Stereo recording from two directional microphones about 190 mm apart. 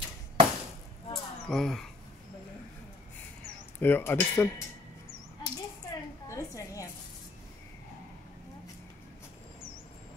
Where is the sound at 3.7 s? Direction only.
10° left (ahead or behind).